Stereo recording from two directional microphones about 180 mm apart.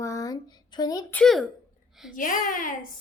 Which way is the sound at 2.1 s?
50° left (ahead or behind).